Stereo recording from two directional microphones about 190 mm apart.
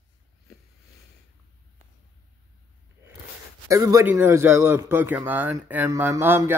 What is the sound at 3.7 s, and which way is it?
A man's voice, 15° right (ahead or behind).